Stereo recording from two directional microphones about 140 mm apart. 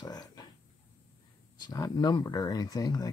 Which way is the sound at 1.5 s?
30° left (ahead or behind).